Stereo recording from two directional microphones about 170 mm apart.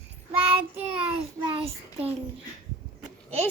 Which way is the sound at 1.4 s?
30° right (ahead or behind).